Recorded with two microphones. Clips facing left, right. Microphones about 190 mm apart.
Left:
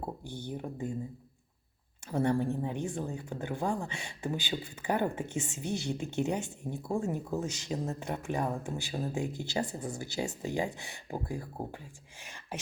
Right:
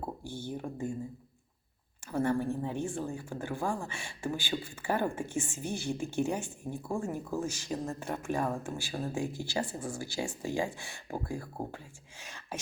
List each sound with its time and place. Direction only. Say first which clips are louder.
0.3 s speech: right 1 dB; 15° left (ahead or behind)
2.0 s speech: left 1 dB; 20° left (ahead or behind)
12.2 s a sound: even; 15° left (ahead or behind)